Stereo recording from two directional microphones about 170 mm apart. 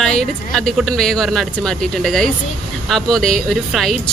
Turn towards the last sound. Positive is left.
turn(degrees=0)  # may be behind; listen again after turning